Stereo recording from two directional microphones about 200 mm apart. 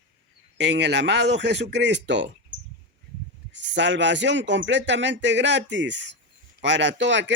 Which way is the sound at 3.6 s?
65° right (ahead or behind).